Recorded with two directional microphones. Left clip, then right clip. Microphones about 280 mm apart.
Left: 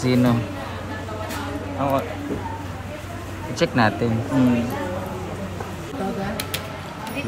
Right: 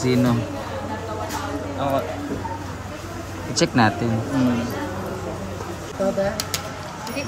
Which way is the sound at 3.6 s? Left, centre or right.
Centre.